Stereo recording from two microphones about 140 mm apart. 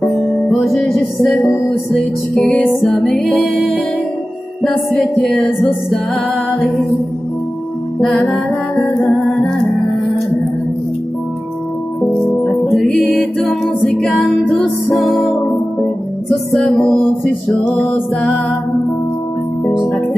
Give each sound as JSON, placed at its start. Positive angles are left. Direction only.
{"t": 0.5, "sound": "music", "side_deg": 0}
{"t": 5.2, "sound": "music", "side_deg": 10}
{"t": 8.0, "sound": "music", "side_deg": 5}
{"t": 12.7, "sound": "music", "side_deg": 0}
{"t": 16.6, "sound": "music", "side_deg": 5}